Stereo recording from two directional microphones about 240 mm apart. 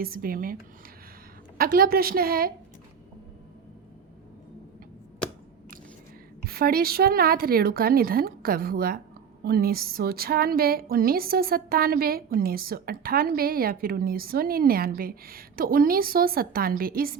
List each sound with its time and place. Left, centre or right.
0.0 s a woman's voice: right
6.4 s a woman's voice: right